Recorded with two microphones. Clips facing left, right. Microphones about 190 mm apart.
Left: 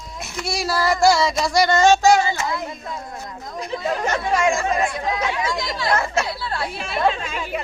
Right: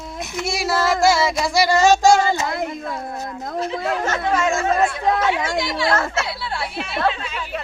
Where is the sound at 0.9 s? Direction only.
Centre (ahead or behind).